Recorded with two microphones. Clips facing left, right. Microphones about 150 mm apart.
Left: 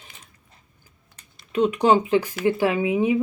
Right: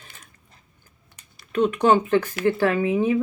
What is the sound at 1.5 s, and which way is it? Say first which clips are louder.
Speech: even; 10° left (ahead or behind).